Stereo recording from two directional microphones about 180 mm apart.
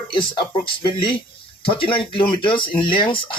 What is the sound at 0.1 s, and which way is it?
Speech, 25° left (ahead or behind).